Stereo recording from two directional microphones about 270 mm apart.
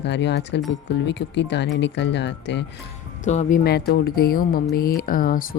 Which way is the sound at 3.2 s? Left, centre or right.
Left.